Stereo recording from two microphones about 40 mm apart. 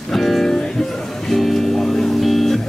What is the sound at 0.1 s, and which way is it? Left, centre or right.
Music, centre.